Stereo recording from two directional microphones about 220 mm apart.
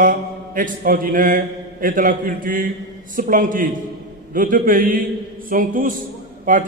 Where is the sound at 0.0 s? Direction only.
40° right (ahead or behind).